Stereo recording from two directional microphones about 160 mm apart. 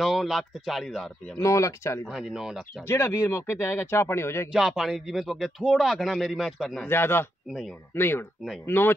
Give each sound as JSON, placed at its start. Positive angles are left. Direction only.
{"t": 0.0, "sound": "speech", "side_deg": 0}
{"t": 1.4, "sound": "speech", "side_deg": 20}
{"t": 2.0, "sound": "speech", "side_deg": 0}
{"t": 2.9, "sound": "speech", "side_deg": 15}
{"t": 4.5, "sound": "speech", "side_deg": 0}
{"t": 6.9, "sound": "speech", "side_deg": 15}